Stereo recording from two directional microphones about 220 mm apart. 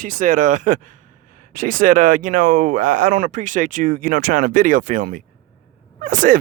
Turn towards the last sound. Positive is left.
turn(degrees=-35)  # may be behind; listen again after turning